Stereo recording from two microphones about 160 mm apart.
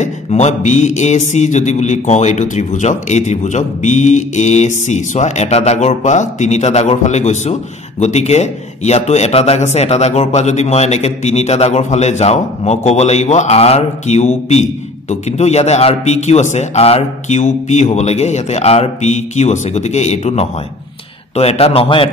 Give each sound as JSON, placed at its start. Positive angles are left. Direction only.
{"t": 0.0, "sound": "a man's voice", "side_deg": 45}